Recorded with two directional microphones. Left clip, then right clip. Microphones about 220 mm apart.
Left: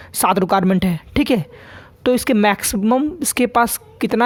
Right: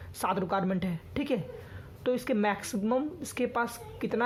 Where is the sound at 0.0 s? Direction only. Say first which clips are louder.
Left 14 dB; 45° left (ahead or behind).